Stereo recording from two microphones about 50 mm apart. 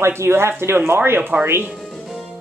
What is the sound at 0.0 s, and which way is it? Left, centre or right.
A woman's voice, right.